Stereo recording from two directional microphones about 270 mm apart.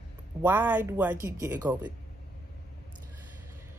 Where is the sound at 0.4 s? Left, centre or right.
Centre.